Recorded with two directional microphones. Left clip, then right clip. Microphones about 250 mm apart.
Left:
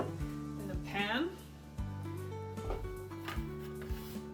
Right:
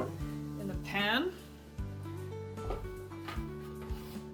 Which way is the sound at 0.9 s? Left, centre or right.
Right.